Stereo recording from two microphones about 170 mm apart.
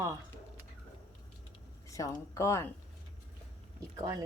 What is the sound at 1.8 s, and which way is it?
Speech, 20° left (ahead or behind).